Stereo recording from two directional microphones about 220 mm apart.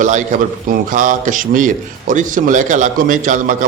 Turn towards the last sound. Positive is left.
turn(degrees=-35)  # may be behind; listen again after turning